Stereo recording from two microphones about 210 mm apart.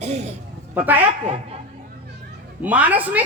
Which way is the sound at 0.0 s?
30° right (ahead or behind).